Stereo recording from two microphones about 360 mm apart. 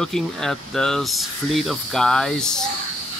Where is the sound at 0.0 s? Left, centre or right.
Centre.